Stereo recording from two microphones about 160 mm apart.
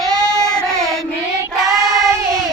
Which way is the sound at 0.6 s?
5° left (ahead or behind).